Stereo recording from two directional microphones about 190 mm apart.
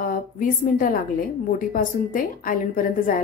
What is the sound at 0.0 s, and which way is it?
A woman's voice, 50° left (ahead or behind).